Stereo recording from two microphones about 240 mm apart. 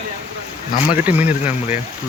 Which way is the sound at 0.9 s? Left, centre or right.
Centre.